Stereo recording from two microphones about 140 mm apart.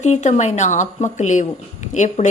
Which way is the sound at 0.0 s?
55° left (ahead or behind).